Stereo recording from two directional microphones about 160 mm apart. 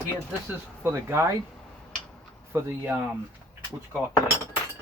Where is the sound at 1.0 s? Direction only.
15° right (ahead or behind).